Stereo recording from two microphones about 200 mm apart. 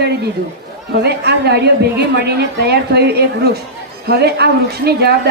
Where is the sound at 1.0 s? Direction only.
55° right (ahead or behind).